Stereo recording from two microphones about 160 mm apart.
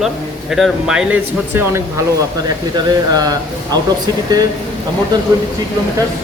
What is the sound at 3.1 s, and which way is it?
Speech, 25° right (ahead or behind).